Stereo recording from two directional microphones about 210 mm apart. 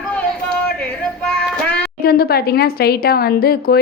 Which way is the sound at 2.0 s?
50° left (ahead or behind).